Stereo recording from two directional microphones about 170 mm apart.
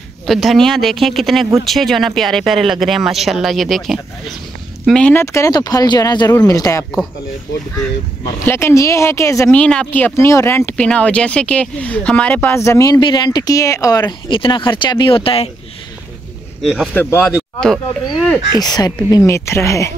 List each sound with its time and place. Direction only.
0.3 s speech: centre (ahead or behind); by 6.9 s 20° left (ahead or behind)
8.5 s speech: 15° left (ahead or behind)
9.6 s speech: 5° left (ahead or behind); by 15.5 s 35° left (ahead or behind)
16.6 s speech: centre (ahead or behind)
16.9 s speech: 10° left (ahead or behind)
18.6 s speech: 20° left (ahead or behind)